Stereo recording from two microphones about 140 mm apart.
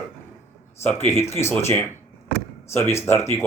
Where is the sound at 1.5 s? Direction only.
15° left (ahead or behind).